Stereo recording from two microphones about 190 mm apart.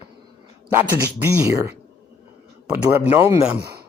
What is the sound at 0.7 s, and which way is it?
A man's voice, 15° right (ahead or behind).